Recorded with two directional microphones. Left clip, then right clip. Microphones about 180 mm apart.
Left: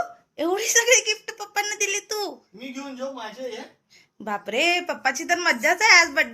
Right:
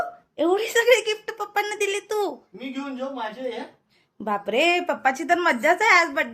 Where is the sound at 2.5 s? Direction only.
Centre (ahead or behind).